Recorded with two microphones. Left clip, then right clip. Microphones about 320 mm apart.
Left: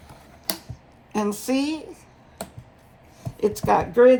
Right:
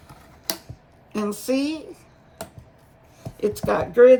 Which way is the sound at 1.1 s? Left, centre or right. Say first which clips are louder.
Even; centre.